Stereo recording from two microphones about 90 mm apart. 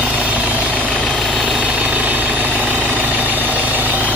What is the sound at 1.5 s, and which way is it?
Vehicle, 15° right (ahead or behind).